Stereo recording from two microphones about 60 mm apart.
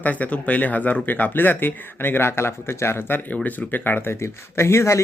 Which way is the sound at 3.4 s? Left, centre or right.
Left.